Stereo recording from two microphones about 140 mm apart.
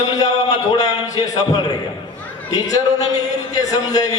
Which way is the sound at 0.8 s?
25° left (ahead or behind).